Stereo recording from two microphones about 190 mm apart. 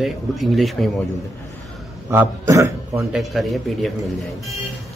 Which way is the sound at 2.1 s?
15° right (ahead or behind).